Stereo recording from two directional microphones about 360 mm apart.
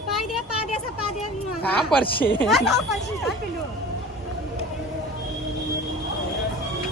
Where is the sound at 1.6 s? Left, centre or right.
Centre.